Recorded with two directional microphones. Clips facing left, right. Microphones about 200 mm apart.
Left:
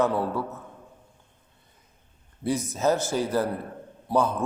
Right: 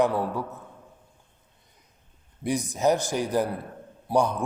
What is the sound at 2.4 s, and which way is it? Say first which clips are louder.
A man's voice: right 1 dB; 15° right (ahead or behind).